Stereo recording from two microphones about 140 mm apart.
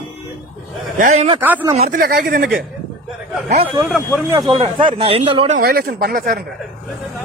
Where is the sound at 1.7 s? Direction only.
50° right (ahead or behind).